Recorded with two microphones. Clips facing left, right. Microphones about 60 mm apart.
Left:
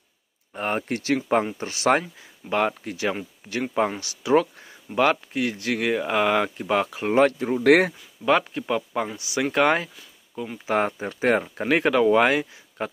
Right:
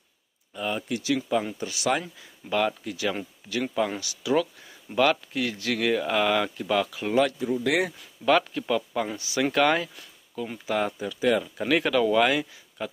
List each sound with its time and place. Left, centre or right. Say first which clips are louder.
0.5 s speech: left 3 dB; left
8.3 s speech: left 1 dB; left
10.7 s speech: left 4 dB; left